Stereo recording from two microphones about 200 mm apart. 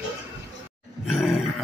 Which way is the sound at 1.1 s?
5° right (ahead or behind).